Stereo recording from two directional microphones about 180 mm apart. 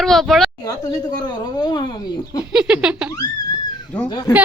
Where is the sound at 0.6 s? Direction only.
20° left (ahead or behind).